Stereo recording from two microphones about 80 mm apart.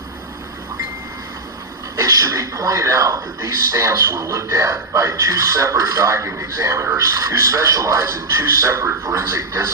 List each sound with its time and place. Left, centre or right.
2.0 s speech: right